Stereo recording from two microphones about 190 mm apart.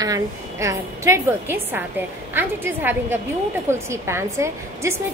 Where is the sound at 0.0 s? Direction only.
15° right (ahead or behind).